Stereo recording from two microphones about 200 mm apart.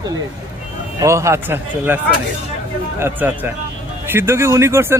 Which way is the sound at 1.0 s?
15° right (ahead or behind).